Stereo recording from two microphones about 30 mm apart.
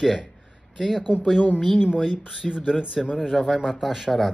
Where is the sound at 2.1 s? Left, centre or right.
Right.